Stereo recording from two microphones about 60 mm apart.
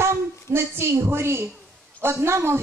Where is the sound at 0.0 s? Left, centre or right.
Right.